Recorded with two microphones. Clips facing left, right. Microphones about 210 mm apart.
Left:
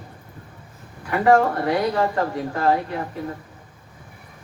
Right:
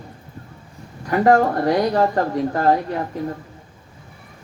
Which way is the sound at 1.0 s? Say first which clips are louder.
Right 2 dB; 40° right (ahead or behind).